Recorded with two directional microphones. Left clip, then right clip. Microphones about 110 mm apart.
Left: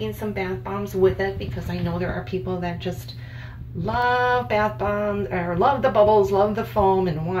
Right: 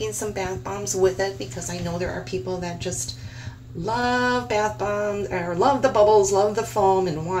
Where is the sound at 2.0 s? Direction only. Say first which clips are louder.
Even; 30° right (ahead or behind).